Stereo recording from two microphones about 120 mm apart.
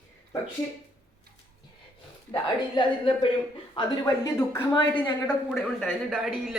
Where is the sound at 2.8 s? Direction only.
45° left (ahead or behind).